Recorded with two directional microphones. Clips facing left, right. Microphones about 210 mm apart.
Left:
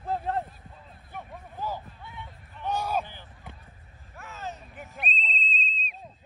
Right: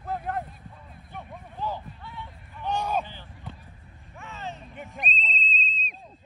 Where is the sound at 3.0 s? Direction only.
15° left (ahead or behind).